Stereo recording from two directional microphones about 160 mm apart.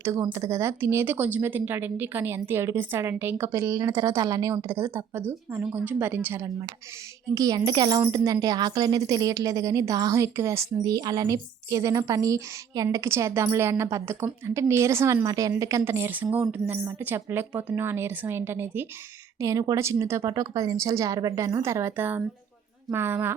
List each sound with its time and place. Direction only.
0.0 s a woman's voice: 15° right (ahead or behind)